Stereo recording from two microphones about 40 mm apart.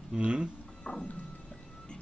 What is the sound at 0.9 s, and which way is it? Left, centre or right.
Speech, left.